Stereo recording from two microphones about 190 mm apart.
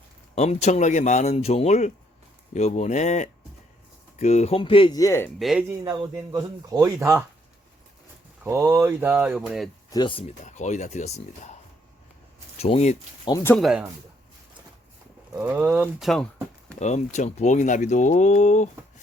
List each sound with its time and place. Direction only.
0.3 s speech: 35° left (ahead or behind); by 5.3 s 15° left (ahead or behind)
5.4 s speech: centre (ahead or behind)
5.6 s speech: 15° right (ahead or behind)
8.4 s speech: 15° right (ahead or behind)
9.9 s speech: 25° left (ahead or behind)
12.5 s speech: 35° left (ahead or behind)
13.2 s speech: 15° left (ahead or behind)
13.6 s speech: centre (ahead or behind)
15.4 s speech: 10° right (ahead or behind)
16.8 s speech: 35° left (ahead or behind)